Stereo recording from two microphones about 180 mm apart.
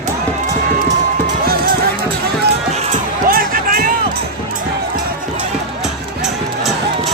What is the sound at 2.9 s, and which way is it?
Music, 50° right (ahead or behind).